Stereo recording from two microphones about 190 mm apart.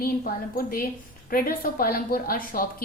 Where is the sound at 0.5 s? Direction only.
50° left (ahead or behind).